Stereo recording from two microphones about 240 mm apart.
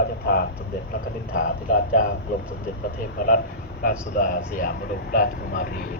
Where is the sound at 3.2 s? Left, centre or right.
Left.